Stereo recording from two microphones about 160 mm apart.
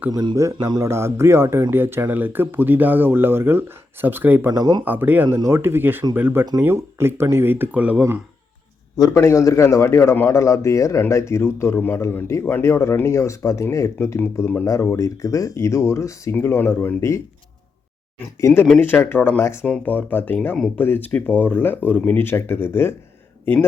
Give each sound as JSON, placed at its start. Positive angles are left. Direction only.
{"t": 0.1, "sound": "speech", "side_deg": -25}
{"t": 4.5, "sound": "speech", "side_deg": -25}
{"t": 4.9, "sound": "speech", "side_deg": -10}
{"t": 9.0, "sound": "a man's voice", "side_deg": 20}
{"t": 18.3, "sound": "a man's voice", "side_deg": 20}